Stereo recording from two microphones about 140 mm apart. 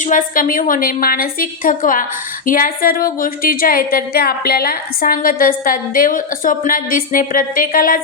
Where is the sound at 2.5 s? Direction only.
90° left.